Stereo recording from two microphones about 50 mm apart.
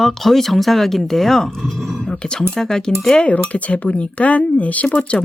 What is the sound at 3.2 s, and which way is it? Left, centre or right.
Speech, left.